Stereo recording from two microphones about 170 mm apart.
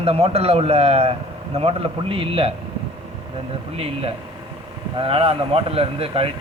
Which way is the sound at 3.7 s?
35° right (ahead or behind).